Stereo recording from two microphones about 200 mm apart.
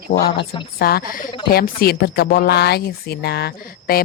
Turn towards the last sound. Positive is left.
turn(degrees=50)  # may be behind; listen again after turning